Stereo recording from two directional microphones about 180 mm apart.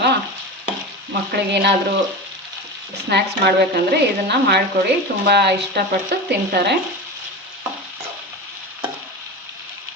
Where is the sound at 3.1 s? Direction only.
65° right (ahead or behind).